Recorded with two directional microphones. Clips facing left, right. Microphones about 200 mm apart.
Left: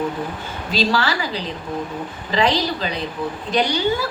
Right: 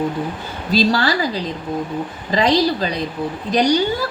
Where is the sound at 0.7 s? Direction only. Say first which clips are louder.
Right 4 dB; 35° right (ahead or behind).